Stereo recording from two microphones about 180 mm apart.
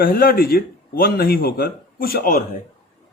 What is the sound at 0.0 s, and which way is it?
A man's voice, 55° left (ahead or behind).